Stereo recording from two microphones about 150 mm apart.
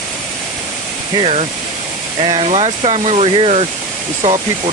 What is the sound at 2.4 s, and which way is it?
Speech, 45° right (ahead or behind).